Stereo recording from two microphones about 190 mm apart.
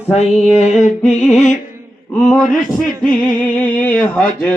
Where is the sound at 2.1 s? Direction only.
5° left (ahead or behind).